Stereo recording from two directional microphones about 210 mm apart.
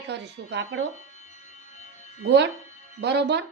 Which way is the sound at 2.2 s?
55° right (ahead or behind).